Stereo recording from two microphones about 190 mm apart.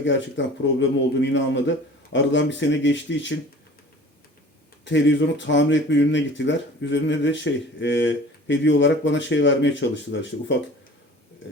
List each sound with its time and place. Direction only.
0.0 s speech: 70° left (ahead or behind)
4.9 s speech: 70° left (ahead or behind)